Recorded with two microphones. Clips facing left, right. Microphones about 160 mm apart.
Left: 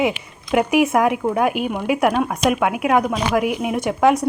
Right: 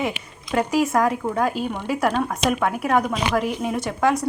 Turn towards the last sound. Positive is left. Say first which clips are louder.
# left 5 dB
turn(degrees=20)  # may be behind; listen again after turning